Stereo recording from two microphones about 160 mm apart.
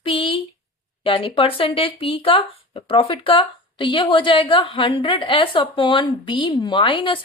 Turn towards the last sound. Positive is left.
turn(degrees=30)  # may be behind; listen again after turning